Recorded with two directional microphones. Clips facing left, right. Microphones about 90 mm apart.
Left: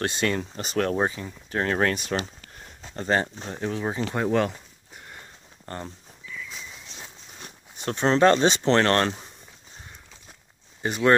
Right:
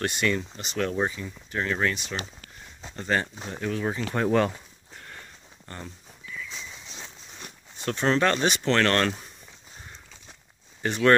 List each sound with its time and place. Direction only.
0.0 s speech: 30° left (ahead or behind)
0.3 s speech: 45° left (ahead or behind)
3.0 s speech: 35° left (ahead or behind)
4.1 s speech: 5° left (ahead or behind)
4.9 s a sound: 15° left (ahead or behind)
5.7 s speech: 35° left (ahead or behind)
6.5 s walk: 5° left (ahead or behind)
7.7 s speech: 25° left (ahead or behind)